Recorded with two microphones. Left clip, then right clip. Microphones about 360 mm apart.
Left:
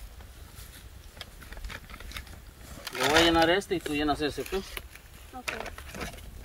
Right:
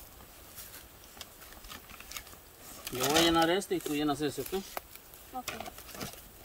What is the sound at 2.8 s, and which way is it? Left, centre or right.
Speech, centre.